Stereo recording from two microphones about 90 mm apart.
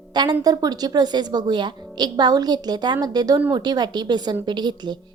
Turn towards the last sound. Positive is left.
turn(degrees=-55)  # may be behind; listen again after turning